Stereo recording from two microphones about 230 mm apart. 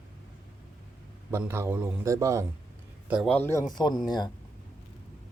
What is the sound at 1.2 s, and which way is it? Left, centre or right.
A man's voice, centre.